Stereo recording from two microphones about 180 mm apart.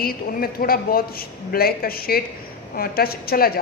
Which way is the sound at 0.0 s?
55° left (ahead or behind).